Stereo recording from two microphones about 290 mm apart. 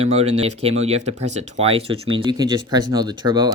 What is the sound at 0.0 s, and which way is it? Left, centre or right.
Speech, right.